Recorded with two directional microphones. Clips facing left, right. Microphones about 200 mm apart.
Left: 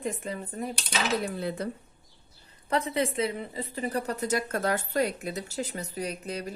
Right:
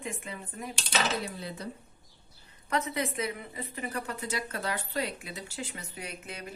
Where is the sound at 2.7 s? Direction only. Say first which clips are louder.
Left 4 dB; 30° left (ahead or behind).